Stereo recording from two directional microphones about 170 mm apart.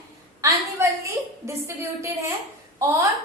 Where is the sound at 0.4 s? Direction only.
15° right (ahead or behind).